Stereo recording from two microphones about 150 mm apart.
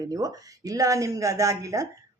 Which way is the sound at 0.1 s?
25° right (ahead or behind).